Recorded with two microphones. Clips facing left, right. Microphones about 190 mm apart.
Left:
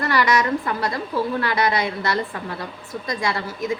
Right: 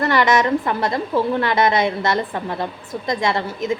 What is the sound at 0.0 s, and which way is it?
A woman's voice, 25° right (ahead or behind).